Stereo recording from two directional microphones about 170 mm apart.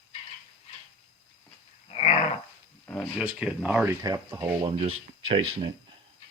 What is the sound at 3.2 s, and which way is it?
Speech, 5° right (ahead or behind).